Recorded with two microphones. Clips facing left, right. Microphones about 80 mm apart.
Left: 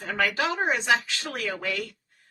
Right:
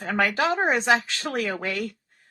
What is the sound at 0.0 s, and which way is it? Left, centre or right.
Speech, right.